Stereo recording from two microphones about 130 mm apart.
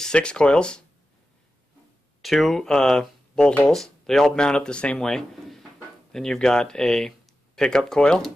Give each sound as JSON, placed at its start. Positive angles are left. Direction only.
{"t": 0.0, "sound": "speech", "side_deg": 5}
{"t": 2.2, "sound": "speech", "side_deg": 0}